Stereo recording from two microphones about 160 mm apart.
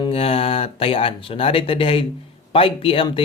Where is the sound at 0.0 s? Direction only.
35° left (ahead or behind).